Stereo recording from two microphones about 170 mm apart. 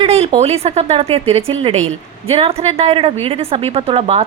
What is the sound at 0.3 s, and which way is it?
A woman's voice, 35° right (ahead or behind).